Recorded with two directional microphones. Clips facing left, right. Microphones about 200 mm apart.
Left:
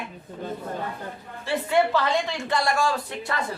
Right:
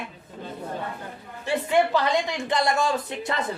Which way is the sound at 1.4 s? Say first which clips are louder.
Even; 15° right (ahead or behind).